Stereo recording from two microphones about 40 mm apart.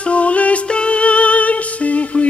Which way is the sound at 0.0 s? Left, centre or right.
Left.